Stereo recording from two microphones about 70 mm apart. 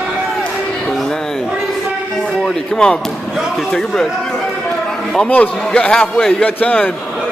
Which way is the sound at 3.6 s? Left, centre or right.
Centre.